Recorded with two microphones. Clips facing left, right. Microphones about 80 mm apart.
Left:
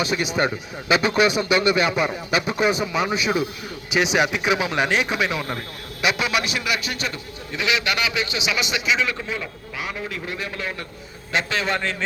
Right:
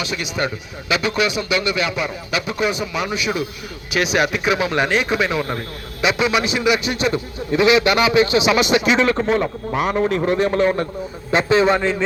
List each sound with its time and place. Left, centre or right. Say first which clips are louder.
0.0 s speech: left 2 dB; left
3.9 s a man's voice: right 1 dB; centre
7.1 s a man's voice: right 11 dB; right
11.3 s a man's voice: right 8 dB; right
11.8 s speech: right 7 dB; centre